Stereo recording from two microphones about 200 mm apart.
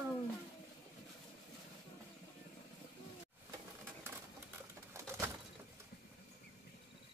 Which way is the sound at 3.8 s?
10° right (ahead or behind).